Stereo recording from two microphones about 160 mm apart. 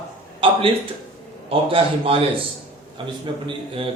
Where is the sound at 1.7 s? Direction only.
35° right (ahead or behind).